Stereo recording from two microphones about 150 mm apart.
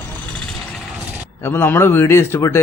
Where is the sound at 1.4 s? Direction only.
15° left (ahead or behind).